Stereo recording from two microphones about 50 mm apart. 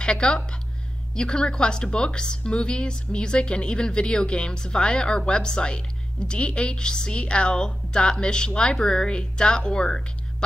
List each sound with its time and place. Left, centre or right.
0.0 s a woman's voice: centre